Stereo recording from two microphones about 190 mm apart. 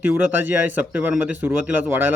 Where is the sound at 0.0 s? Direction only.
10° right (ahead or behind).